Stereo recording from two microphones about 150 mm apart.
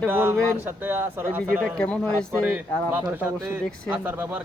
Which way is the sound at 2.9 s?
10° right (ahead or behind).